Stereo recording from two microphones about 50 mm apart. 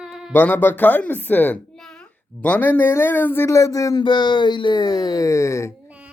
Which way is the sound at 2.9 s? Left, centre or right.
Left.